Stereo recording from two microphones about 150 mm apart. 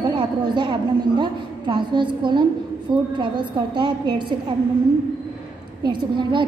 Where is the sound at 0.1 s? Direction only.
35° right (ahead or behind).